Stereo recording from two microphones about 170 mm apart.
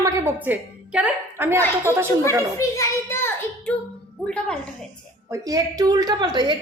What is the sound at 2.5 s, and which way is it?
Child singing, 20° left (ahead or behind).